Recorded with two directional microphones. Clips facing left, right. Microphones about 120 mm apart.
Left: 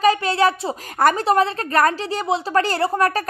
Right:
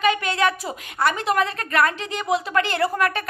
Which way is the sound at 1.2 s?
30° left (ahead or behind).